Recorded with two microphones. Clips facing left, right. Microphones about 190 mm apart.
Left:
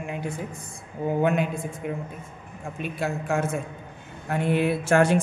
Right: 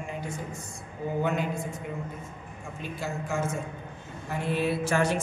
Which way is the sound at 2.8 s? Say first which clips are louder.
Left 5 dB; 60° left (ahead or behind).